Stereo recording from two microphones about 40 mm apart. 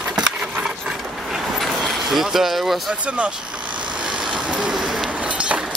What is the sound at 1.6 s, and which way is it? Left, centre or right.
Vehicle, centre.